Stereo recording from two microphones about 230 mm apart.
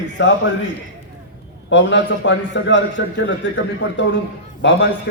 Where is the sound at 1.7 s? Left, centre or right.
Left.